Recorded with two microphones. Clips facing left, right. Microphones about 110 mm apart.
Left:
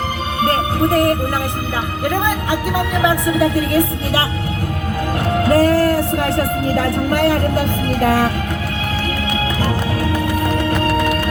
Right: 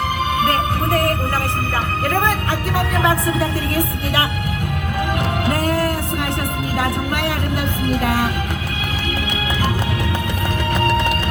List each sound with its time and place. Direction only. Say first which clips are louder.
0.4 s music: left 7 dB; 25° left (ahead or behind)
5.5 s music: left 8 dB; 35° left (ahead or behind)
6.7 s speech: left 3 dB; 40° left (ahead or behind)